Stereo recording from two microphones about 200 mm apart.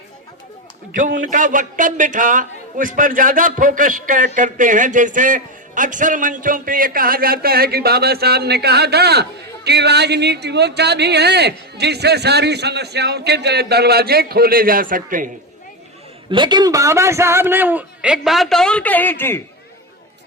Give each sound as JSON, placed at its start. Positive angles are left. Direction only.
{"t": 0.9, "sound": "a man's voice", "side_deg": -40}
{"t": 16.3, "sound": "a man's voice", "side_deg": -20}